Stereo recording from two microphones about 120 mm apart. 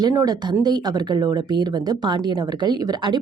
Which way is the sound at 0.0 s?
30° right (ahead or behind).